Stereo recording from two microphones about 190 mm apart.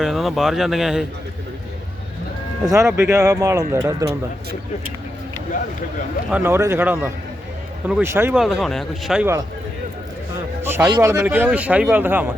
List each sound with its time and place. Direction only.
0.0 s speech: centre (ahead or behind)
2.6 s speech: 15° right (ahead or behind)
6.3 s speech: 10° right (ahead or behind)
8.4 s speech: centre (ahead or behind)
10.6 s a sound: 10° right (ahead or behind)
10.9 s speech: 15° right (ahead or behind)